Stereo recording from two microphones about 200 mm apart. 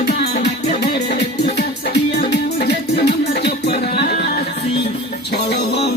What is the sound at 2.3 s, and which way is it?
Music, 55° left (ahead or behind).